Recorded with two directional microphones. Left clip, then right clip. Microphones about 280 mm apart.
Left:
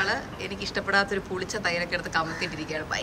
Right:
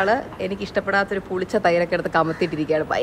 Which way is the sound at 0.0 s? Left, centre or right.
Centre.